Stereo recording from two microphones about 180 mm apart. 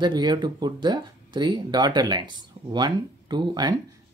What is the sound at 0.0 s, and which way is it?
Speech, 25° right (ahead or behind).